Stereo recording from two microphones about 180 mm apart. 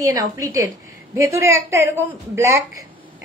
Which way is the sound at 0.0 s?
20° right (ahead or behind).